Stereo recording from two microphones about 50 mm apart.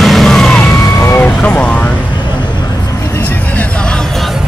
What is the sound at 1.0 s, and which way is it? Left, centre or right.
Vehicle, left.